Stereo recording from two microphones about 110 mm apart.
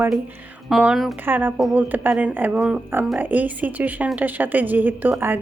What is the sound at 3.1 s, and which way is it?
A woman's voice, 15° right (ahead or behind).